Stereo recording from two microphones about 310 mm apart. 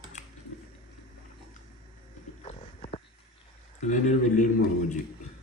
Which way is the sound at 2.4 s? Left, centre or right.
Centre.